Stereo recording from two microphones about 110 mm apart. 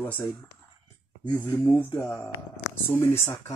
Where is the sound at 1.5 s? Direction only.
20° left (ahead or behind).